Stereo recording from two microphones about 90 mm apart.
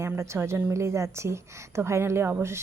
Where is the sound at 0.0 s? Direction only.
30° right (ahead or behind).